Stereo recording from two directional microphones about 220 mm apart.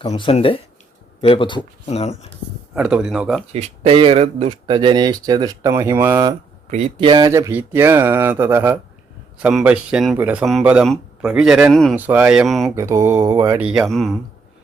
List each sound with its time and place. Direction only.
0.1 s speech: 25° left (ahead or behind)
2.7 s speech: 5° right (ahead or behind)
3.5 s speech: 25° right (ahead or behind)
6.7 s speech: 30° right (ahead or behind); by 12.7 s centre (ahead or behind)
12.7 s speech: 15° right (ahead or behind)